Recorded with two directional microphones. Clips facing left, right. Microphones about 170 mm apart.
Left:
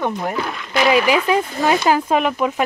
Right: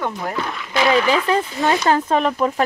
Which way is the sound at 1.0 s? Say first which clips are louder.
Left 1 dB; 10° left (ahead or behind).